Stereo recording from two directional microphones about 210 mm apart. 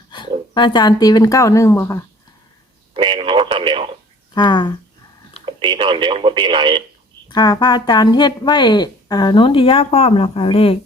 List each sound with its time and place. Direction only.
0.1 s speech: 20° left (ahead or behind)
2.9 s speech: 25° right (ahead or behind)
4.4 s speech: 20° left (ahead or behind)
5.5 s speech: 25° right (ahead or behind)
7.3 s speech: 20° left (ahead or behind)